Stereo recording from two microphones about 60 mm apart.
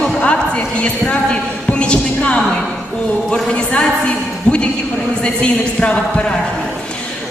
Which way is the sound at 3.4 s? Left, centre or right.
Centre.